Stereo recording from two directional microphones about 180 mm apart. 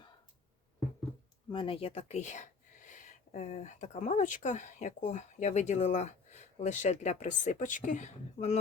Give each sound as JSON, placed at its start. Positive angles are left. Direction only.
{"t": 1.5, "sound": "speech", "side_deg": 30}